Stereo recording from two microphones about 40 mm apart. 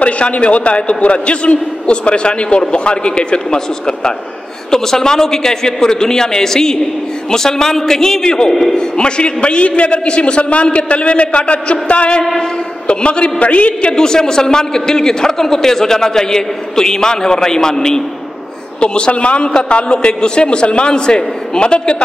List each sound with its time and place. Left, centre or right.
0.0 s a man's voice: left
13.9 s a man's voice: centre
18.8 s a man's voice: left